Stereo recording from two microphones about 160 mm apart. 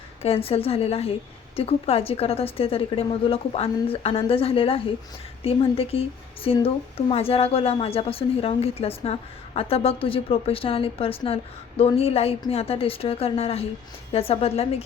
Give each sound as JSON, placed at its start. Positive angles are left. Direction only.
{"t": 0.2, "sound": "a woman's voice", "side_deg": 35}